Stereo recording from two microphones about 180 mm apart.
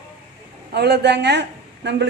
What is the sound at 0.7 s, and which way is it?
A woman's voice, 65° right (ahead or behind).